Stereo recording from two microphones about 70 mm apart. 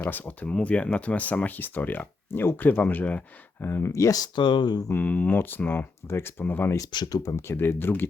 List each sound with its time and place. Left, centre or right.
0.0 s speech: left
3.7 s speech: left
4.1 s speech: left
4.9 s speech: left
6.9 s speech: left
7.2 s speech: left
7.4 s speech: left